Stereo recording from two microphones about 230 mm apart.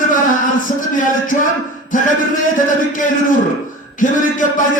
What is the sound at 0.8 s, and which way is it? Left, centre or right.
Music, left.